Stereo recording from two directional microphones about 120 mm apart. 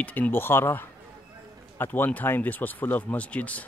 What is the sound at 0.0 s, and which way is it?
Speech, 15° left (ahead or behind).